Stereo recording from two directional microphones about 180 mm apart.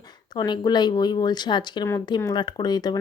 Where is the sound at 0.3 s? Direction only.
25° left (ahead or behind).